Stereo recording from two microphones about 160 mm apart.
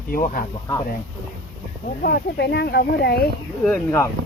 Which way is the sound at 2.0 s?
85° left.